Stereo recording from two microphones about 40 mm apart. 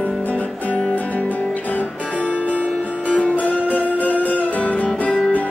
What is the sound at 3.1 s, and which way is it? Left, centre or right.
Music, left.